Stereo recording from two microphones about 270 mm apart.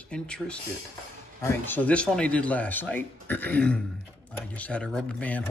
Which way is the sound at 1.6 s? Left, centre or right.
Centre.